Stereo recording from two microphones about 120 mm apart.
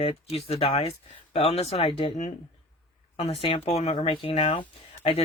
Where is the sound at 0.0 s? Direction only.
55° left (ahead or behind).